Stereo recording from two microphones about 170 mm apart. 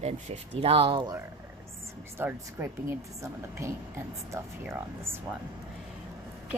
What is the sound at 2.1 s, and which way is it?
A woman's voice, 15° right (ahead or behind).